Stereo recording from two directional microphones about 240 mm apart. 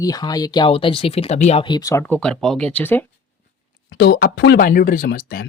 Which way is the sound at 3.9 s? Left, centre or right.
Left.